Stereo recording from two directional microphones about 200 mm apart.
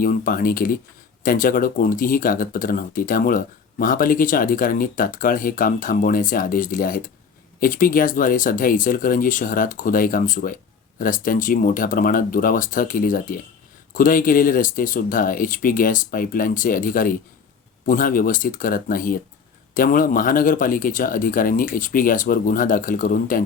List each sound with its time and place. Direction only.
0.0 s speech: 45° left (ahead or behind)